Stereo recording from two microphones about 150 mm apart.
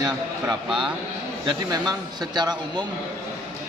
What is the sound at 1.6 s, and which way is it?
Speech, 25° right (ahead or behind).